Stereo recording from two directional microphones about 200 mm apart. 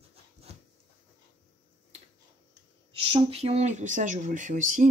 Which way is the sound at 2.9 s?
25° right (ahead or behind).